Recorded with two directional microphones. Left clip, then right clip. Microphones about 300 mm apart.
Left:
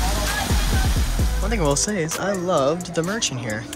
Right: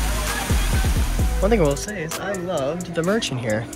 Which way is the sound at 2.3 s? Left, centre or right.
Centre.